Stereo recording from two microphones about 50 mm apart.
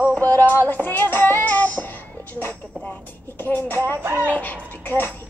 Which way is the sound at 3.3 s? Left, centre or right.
Left.